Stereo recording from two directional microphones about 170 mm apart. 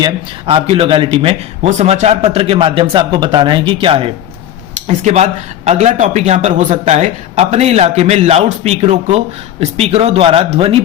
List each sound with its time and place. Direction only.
0.0 s speech: 30° right (ahead or behind)